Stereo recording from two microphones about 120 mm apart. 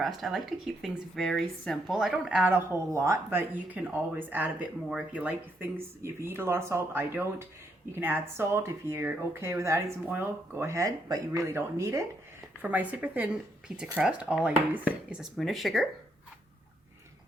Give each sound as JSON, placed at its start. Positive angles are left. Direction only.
{"t": 0.0, "sound": "speech", "side_deg": 0}
{"t": 3.2, "sound": "speech", "side_deg": -15}
{"t": 15.2, "sound": "speech", "side_deg": 0}